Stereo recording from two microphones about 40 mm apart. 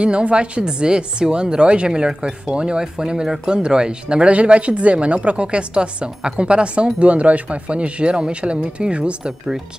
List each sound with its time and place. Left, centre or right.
0.0 s a woman's voice: right
4.3 s a woman's voice: right